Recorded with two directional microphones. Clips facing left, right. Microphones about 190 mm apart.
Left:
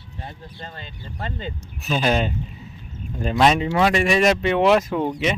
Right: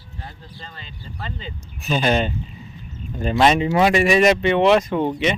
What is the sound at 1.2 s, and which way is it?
Speech, 50° left (ahead or behind).